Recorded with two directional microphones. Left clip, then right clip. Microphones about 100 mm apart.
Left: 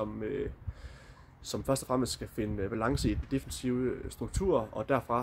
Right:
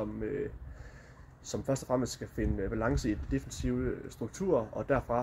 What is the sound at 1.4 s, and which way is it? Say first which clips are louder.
Speech: left 1 dB; 35° left (ahead or behind).